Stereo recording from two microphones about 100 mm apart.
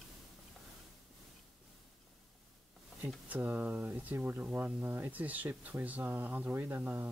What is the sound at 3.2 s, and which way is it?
Speech, 20° right (ahead or behind).